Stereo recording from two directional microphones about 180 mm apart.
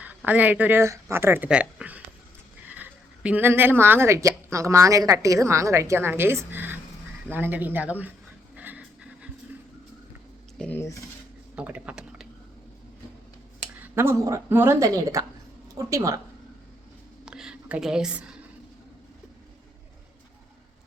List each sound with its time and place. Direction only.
0.0 s a woman's voice: 10° right (ahead or behind)
8.5 s pant: 10° right (ahead or behind)
10.6 s speech: 10° left (ahead or behind)
11.5 s typing: 5° right (ahead or behind)
13.9 s a woman's voice: 15° right (ahead or behind)
17.2 s a sound: 5° right (ahead or behind)